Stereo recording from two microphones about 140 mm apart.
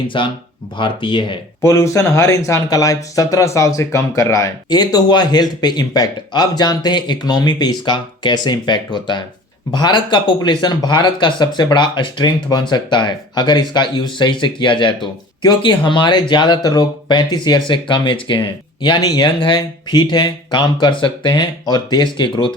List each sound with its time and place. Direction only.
0.1 s speech: 35° left (ahead or behind)
1.6 s speech: 20° left (ahead or behind); by 22.5 s 35° left (ahead or behind)